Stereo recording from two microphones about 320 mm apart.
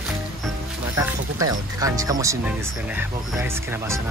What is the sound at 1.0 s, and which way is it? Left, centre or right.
Speech, centre.